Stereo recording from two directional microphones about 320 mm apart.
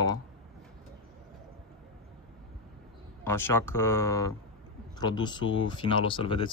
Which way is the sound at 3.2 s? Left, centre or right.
Centre.